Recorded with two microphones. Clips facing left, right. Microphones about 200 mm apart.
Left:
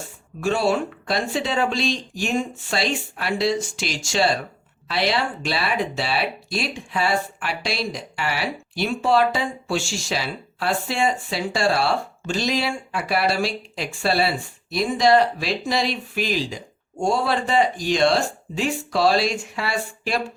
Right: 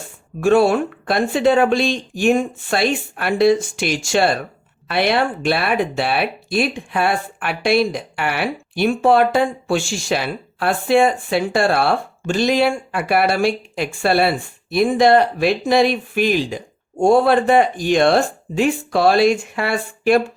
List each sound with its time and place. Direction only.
0.3 s speech: 55° right (ahead or behind)